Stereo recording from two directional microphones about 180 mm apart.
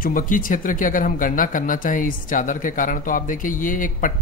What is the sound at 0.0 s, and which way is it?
Speech, 50° left (ahead or behind).